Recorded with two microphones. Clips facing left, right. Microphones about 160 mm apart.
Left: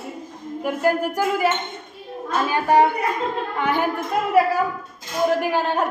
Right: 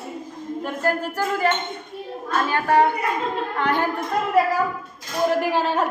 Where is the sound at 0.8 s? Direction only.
10° left (ahead or behind).